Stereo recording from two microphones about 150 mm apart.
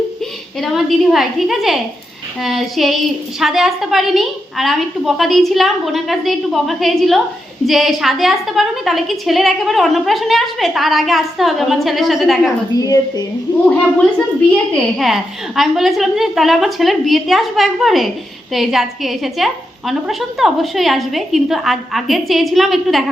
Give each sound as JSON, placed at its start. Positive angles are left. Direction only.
{"t": 0.6, "sound": "a woman's voice", "side_deg": 0}
{"t": 12.7, "sound": "a woman's voice", "side_deg": 25}
{"t": 14.5, "sound": "a woman's voice", "side_deg": 0}